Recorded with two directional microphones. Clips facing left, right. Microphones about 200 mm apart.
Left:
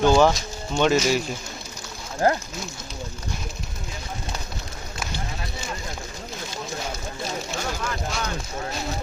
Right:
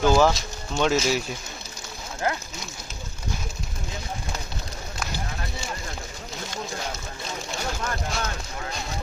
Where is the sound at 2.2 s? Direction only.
40° left (ahead or behind).